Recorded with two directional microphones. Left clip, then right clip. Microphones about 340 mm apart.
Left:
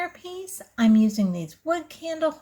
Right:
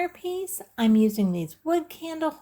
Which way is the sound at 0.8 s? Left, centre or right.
Centre.